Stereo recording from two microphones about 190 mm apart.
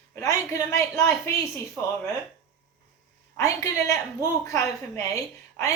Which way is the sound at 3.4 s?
15° left (ahead or behind).